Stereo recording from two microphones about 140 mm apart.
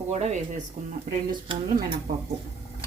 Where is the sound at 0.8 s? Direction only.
65° right (ahead or behind).